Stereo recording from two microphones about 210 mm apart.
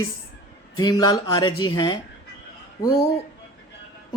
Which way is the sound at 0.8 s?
20° left (ahead or behind).